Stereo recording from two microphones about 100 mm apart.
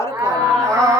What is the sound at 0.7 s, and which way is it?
Speech, 30° right (ahead or behind).